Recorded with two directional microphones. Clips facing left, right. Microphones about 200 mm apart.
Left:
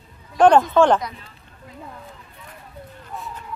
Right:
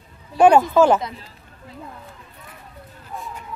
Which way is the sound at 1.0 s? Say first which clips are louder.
Right 1 dB; 35° right (ahead or behind).